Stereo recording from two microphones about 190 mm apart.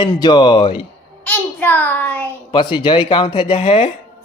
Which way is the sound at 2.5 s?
25° left (ahead or behind).